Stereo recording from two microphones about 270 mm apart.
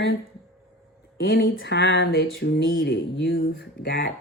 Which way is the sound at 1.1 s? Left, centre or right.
Left.